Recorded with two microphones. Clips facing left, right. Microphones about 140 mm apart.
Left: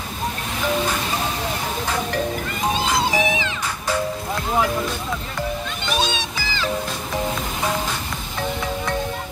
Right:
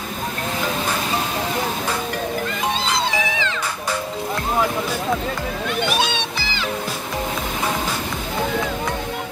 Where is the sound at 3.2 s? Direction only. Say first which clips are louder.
Left 2 dB; 15° left (ahead or behind).